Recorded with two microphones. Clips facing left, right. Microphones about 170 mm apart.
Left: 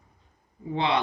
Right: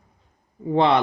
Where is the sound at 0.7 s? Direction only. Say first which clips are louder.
Right 7 dB; 55° right (ahead or behind).